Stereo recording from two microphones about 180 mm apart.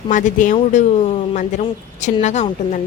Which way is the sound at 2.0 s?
40° left (ahead or behind).